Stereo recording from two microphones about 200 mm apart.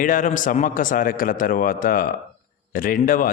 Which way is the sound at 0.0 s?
40° left (ahead or behind).